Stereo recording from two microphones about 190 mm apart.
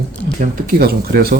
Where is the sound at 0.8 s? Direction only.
55° right (ahead or behind).